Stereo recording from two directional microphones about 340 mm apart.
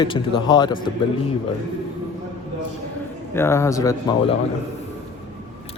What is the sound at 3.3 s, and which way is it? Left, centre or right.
Speech, centre.